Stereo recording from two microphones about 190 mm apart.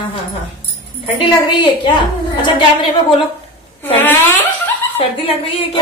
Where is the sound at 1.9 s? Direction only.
25° left (ahead or behind).